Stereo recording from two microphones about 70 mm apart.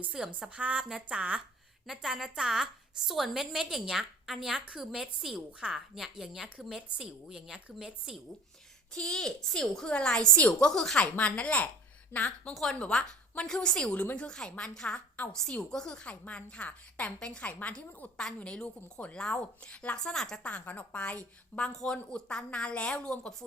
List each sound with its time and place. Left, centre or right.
0.1 s a woman's voice: centre
1.9 s a woman's voice: centre
8.9 s a woman's voice: centre
11.0 s a woman's voice: left
12.1 s a woman's voice: left
12.5 s a woman's voice: centre
20.1 s a woman's voice: centre
20.4 s a woman's voice: centre
21.6 s a woman's voice: centre